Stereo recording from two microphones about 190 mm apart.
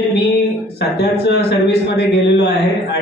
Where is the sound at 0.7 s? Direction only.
60° left (ahead or behind).